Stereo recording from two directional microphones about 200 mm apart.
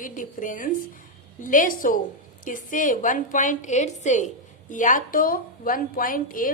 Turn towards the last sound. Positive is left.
turn(degrees=45)  # may be behind; listen again after turning